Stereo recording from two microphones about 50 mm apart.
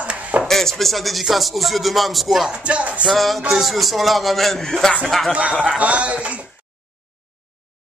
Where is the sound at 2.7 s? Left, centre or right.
Right.